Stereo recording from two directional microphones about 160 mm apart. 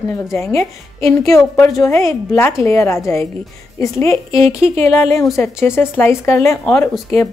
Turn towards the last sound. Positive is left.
turn(degrees=10)  # may be behind; listen again after turning